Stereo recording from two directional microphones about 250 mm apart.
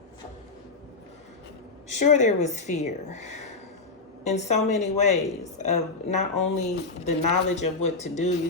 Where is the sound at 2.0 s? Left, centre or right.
Left.